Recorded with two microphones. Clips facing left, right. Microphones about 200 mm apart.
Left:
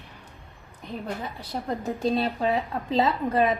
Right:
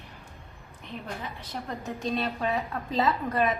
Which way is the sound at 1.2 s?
35° left (ahead or behind).